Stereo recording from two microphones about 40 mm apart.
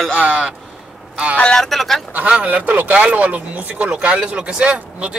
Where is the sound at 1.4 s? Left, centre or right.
Centre.